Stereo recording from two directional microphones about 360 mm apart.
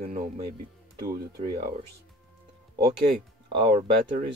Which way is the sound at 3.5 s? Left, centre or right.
Centre.